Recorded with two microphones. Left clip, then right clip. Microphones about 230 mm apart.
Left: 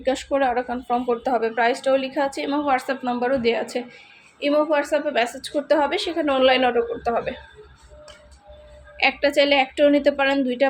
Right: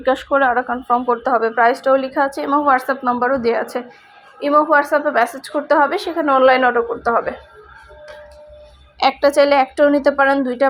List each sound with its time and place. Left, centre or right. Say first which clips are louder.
0.0 s speech: right 6 dB; centre
9.0 s a woman's voice: right 5 dB; centre